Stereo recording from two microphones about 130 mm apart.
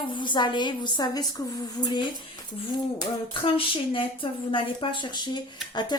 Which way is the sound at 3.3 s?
45° left (ahead or behind).